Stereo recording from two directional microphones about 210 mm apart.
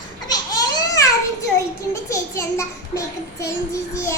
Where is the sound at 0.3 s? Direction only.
15° left (ahead or behind).